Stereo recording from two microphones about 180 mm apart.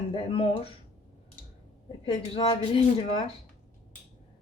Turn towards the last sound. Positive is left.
turn(degrees=30)  # may be behind; listen again after turning